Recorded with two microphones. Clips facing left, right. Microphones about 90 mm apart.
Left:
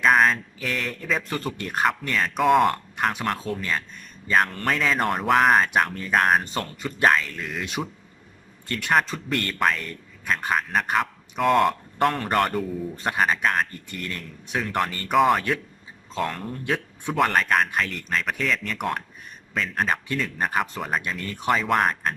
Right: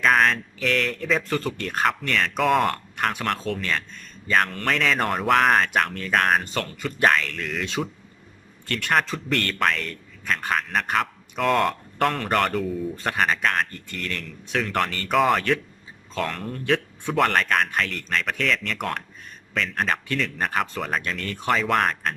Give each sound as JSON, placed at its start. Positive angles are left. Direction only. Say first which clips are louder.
{"t": 0.0, "sound": "speech", "louder": "left 1 dB", "side_deg": 10}
{"t": 2.9, "sound": "a man's voice", "louder": "even", "side_deg": 20}